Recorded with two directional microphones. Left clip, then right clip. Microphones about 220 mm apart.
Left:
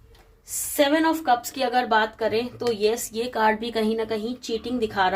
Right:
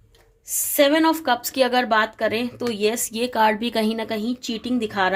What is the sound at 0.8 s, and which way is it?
A woman's voice, 50° right (ahead or behind).